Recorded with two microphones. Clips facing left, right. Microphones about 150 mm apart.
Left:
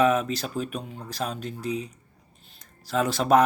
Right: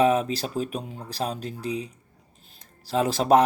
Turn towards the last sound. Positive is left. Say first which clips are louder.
# right 1 dB
turn(degrees=-35)  # may be behind; listen again after turning